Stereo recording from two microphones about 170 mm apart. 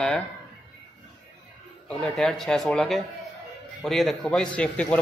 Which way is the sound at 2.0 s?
Centre (ahead or behind).